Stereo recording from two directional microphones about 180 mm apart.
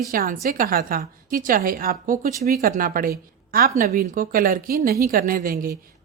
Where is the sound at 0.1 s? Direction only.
50° right (ahead or behind).